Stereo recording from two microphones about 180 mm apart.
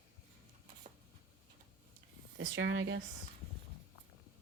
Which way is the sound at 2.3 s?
90° right.